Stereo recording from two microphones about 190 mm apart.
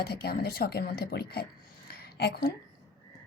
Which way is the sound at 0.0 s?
55° left (ahead or behind).